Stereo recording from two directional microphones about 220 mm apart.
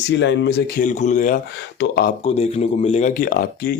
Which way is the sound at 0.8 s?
35° left (ahead or behind).